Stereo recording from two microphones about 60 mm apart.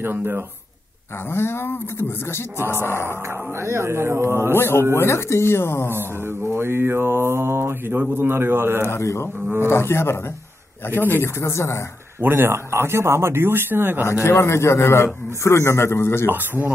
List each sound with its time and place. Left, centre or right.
0.0 s speech: right
1.3 s speech: left
3.6 s mantra: right
4.6 s speech: left
5.9 s mantra: right
8.0 s speech: right
8.8 s speech: left
11.4 s speech: left
12.2 s speech: right
14.0 s speech: left
16.3 s speech: right